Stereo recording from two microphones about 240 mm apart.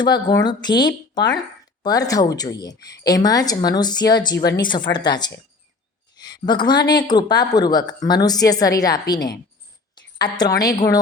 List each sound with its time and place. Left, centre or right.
0.0 s speech: centre
6.4 s speech: centre